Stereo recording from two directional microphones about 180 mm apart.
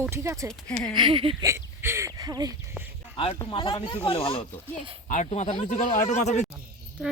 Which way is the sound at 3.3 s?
25° left (ahead or behind).